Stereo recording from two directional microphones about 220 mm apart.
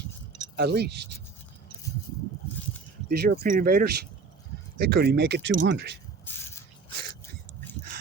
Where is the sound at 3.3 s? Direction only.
40° right (ahead or behind); by 5.8 s 55° right (ahead or behind).